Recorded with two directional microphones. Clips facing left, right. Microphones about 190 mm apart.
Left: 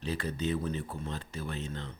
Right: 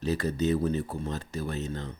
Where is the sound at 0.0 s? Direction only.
40° right (ahead or behind).